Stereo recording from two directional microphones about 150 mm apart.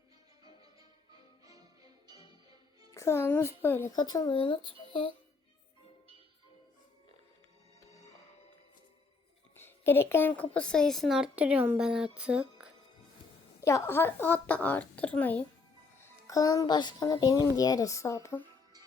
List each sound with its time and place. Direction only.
0.4 s music: 25° right (ahead or behind)
2.9 s speech: 20° left (ahead or behind)
3.9 s speech: 25° left (ahead or behind)
9.6 s a woman's voice: 15° left (ahead or behind); by 12.7 s 5° right (ahead or behind)
13.6 s speech: 20° left (ahead or behind)
16.0 s speech: 20° left (ahead or behind)